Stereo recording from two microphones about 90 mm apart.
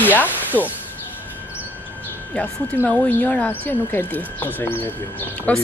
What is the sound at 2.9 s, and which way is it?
A woman's voice, 10° left (ahead or behind).